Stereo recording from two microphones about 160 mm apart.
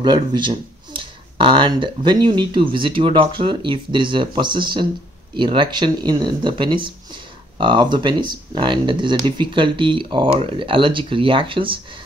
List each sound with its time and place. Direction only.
0.0 s speech: 25° right (ahead or behind)